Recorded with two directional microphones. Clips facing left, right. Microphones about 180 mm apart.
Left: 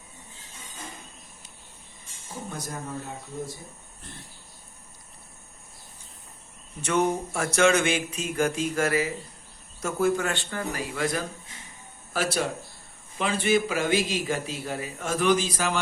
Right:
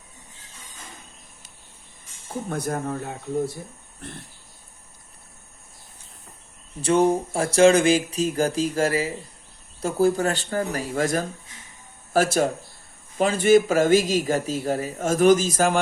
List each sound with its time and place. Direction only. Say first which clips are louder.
2.5 s speech: right 10 dB; 60° right (ahead or behind)
4.0 s speech: right 8 dB; 60° right (ahead or behind)
6.8 s a sound: right 5 dB; 30° right (ahead or behind)
12.1 s a man's voice: right 7 dB; 45° right (ahead or behind)